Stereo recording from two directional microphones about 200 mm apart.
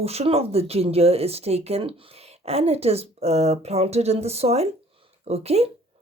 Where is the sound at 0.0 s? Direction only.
30° right (ahead or behind).